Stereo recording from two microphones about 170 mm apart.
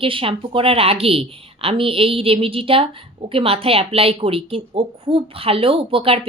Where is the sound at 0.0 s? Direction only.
30° right (ahead or behind).